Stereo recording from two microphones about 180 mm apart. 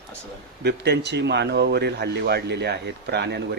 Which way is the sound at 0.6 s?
65° right (ahead or behind).